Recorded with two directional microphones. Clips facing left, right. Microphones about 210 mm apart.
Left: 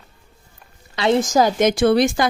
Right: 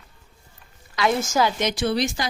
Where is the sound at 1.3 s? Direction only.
40° left (ahead or behind).